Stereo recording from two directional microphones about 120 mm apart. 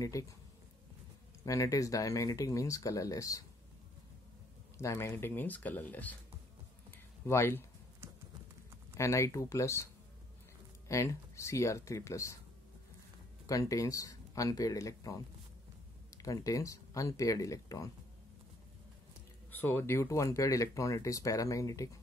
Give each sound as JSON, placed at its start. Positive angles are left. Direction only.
{"t": 0.0, "sound": "speech", "side_deg": 30}
{"t": 1.4, "sound": "speech", "side_deg": 30}
{"t": 4.7, "sound": "speech", "side_deg": 20}
{"t": 7.2, "sound": "speech", "side_deg": 20}
{"t": 8.9, "sound": "speech", "side_deg": 25}
{"t": 10.9, "sound": "speech", "side_deg": 25}
{"t": 13.5, "sound": "speech", "side_deg": 30}
{"t": 19.5, "sound": "speech", "side_deg": 15}